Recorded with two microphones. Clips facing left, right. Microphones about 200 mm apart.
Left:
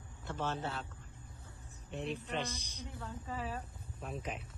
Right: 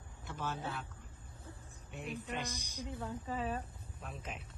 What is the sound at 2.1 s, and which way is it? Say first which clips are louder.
A man's voice: left 2 dB; 15° right (ahead or behind).